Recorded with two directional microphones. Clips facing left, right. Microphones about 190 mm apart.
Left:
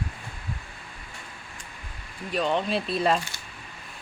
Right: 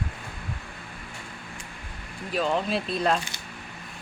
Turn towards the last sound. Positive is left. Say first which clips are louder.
# left 1 dB
turn(degrees=0)  # may be behind; listen again after turning